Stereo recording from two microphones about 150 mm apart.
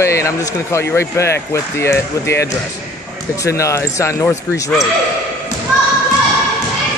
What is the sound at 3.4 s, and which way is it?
A man's voice, 20° left (ahead or behind).